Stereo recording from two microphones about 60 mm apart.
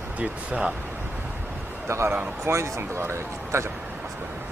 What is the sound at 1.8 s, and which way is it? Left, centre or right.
Speech, right.